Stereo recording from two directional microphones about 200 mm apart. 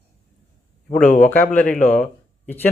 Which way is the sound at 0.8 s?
35° left (ahead or behind).